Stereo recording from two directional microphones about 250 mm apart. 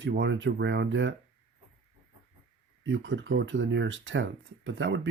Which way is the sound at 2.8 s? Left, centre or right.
Right.